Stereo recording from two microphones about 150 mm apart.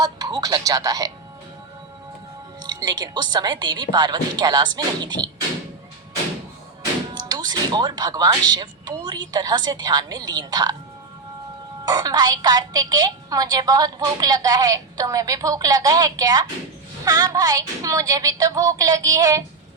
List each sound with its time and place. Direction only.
0.0 s speech: 25° right (ahead or behind)
2.6 s a woman's voice: 25° right (ahead or behind)
7.1 s a woman's voice: 30° right (ahead or behind)
11.9 s a woman's voice: 25° right (ahead or behind)